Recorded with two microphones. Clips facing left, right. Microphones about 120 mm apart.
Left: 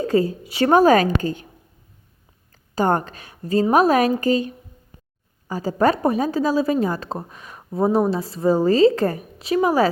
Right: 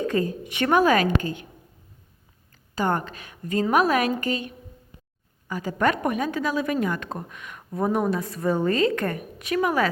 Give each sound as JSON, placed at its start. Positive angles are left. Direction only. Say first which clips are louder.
{"t": 0.0, "sound": "a woman's voice", "louder": "left 5 dB", "side_deg": 30}
{"t": 2.7, "sound": "a woman's voice", "louder": "left 5 dB", "side_deg": 40}